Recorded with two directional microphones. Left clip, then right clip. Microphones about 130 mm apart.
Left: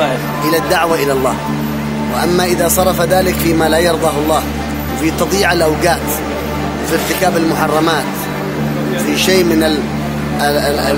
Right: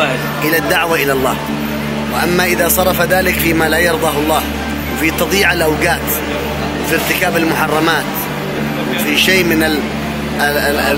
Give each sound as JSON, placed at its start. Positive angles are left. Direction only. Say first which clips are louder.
{"t": 0.5, "sound": "speech", "louder": "left 1 dB", "side_deg": 30}
{"t": 2.2, "sound": "speech", "louder": "even", "side_deg": 30}
{"t": 9.1, "sound": "speech", "louder": "even", "side_deg": 35}